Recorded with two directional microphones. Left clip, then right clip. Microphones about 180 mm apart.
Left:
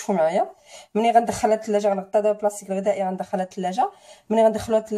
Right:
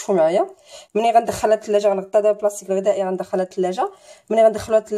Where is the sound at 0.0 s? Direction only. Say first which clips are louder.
Right 4 dB; 40° right (ahead or behind).